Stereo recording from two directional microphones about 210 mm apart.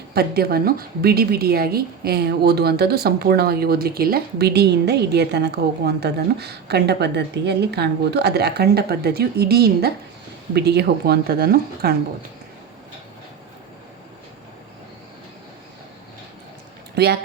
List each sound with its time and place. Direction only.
0.1 s a woman's voice: 45° right (ahead or behind)
16.9 s speech: 50° right (ahead or behind)